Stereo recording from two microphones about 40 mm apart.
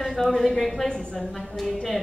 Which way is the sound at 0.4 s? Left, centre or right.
Centre.